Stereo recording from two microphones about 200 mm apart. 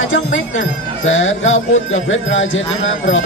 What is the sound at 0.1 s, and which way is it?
Speech, 70° left (ahead or behind).